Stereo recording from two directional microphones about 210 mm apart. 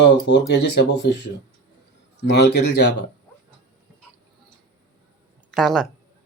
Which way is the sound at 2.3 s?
55° left (ahead or behind).